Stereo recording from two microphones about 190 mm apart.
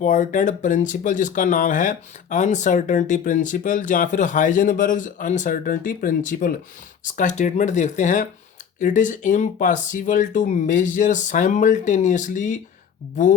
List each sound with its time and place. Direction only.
0.0 s speech: 40° left (ahead or behind)